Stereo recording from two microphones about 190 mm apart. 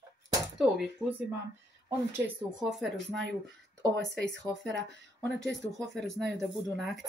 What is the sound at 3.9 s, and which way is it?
Speech, 65° right (ahead or behind).